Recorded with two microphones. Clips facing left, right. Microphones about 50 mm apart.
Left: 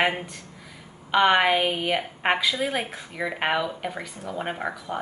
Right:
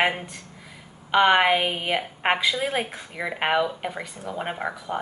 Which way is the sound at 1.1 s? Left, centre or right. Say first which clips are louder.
Right 1 dB; centre.